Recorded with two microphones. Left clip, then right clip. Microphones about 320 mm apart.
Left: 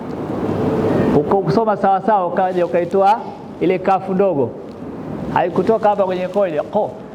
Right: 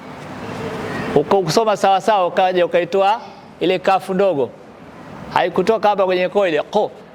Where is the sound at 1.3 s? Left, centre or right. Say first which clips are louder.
Right 1 dB; right.